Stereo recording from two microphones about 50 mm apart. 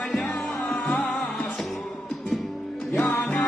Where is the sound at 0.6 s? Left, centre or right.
Left.